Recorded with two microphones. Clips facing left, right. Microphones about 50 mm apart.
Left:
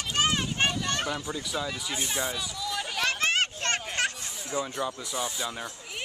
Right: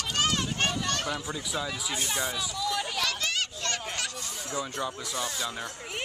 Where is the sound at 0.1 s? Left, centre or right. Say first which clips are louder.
Left 2 dB; centre.